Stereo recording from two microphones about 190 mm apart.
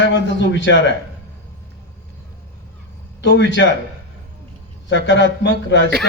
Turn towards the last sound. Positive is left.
turn(degrees=65)  # may be behind; listen again after turning